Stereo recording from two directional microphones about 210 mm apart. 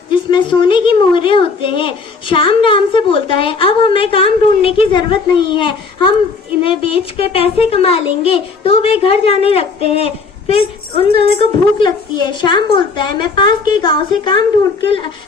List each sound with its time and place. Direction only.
0.1 s a woman's voice: 20° left (ahead or behind)